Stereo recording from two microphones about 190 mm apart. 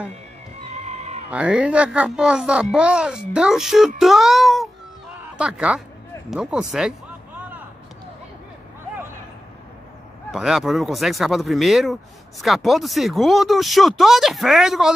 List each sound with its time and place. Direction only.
0.7 s music: 35° right (ahead or behind)
1.3 s speech: 5° right (ahead or behind)
7.3 s a sound: 10° right (ahead or behind)
10.3 s speech: centre (ahead or behind)